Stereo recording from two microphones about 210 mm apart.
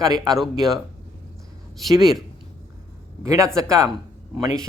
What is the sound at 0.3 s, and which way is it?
Speech, centre (ahead or behind).